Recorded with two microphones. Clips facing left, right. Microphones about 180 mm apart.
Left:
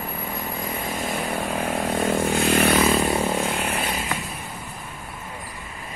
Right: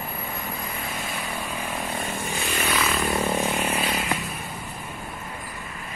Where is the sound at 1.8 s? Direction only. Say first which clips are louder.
Left 11 dB; 75° left (ahead or behind).